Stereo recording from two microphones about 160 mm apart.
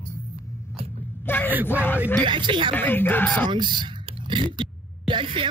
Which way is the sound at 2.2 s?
30° right (ahead or behind).